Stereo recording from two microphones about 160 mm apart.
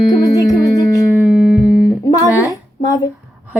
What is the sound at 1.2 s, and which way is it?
Music, 5° right (ahead or behind).